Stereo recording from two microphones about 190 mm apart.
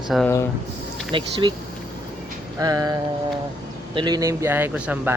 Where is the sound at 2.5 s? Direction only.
20° right (ahead or behind).